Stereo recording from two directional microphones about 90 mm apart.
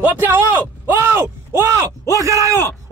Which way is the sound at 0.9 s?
25° right (ahead or behind).